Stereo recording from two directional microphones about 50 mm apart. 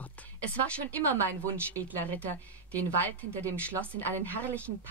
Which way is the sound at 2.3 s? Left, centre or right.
Left.